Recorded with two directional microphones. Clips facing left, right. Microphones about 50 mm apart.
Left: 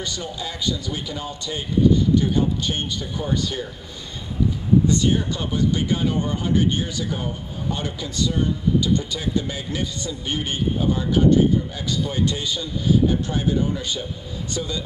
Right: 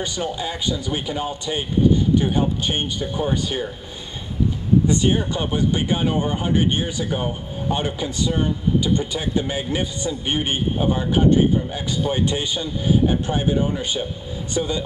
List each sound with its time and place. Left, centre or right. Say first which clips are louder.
0.0 s speech: right 4 dB; right
4.8 s speech: right 1 dB; right
7.1 s speech: right 3 dB; right